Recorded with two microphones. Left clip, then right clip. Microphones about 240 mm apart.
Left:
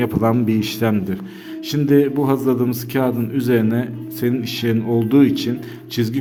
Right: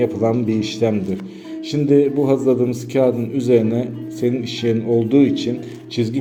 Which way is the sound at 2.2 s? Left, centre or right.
Left.